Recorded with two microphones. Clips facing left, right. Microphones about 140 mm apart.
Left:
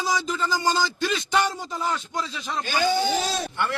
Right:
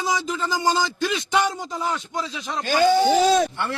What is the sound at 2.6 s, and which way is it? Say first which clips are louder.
Speech: right 6 dB; 35° right (ahead or behind).